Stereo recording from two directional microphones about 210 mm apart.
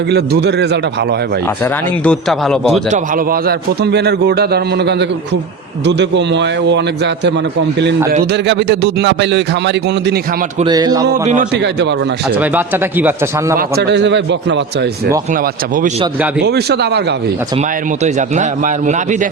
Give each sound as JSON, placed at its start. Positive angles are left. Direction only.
{"t": 0.1, "sound": "a man's voice", "side_deg": -50}
{"t": 2.0, "sound": "a man's voice", "side_deg": 0}
{"t": 2.9, "sound": "a man's voice", "side_deg": -45}
{"t": 10.6, "sound": "speech", "side_deg": -20}
{"t": 11.5, "sound": "speech", "side_deg": -55}
{"t": 12.4, "sound": "speech", "side_deg": -10}
{"t": 13.6, "sound": "speech", "side_deg": -50}
{"t": 15.3, "sound": "a man's voice", "side_deg": -40}
{"t": 16.4, "sound": "a man's voice", "side_deg": -50}
{"t": 18.0, "sound": "a man's voice", "side_deg": -35}